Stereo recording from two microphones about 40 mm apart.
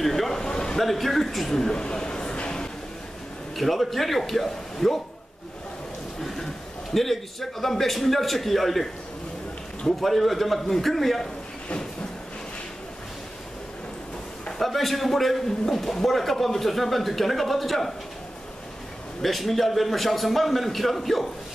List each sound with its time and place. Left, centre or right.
0.0 s a sound: centre
0.7 s speech: centre
3.5 s speech: centre
6.9 s speech: centre
9.9 s speech: centre
14.6 s speech: centre
19.2 s speech: centre